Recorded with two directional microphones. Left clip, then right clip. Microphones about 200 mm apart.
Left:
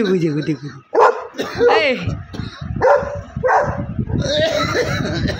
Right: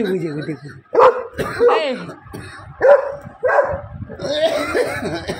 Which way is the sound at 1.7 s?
25° left (ahead or behind).